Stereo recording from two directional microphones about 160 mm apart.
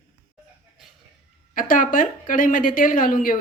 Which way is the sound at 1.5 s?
60° left (ahead or behind).